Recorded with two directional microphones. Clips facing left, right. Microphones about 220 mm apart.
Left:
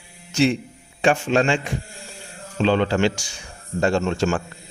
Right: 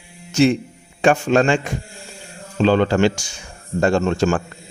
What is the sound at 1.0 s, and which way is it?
A man's voice, 45° right (ahead or behind).